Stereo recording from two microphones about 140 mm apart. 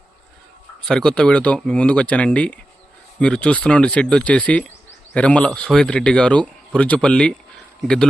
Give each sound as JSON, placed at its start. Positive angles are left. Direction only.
{"t": 0.9, "sound": "speech", "side_deg": 5}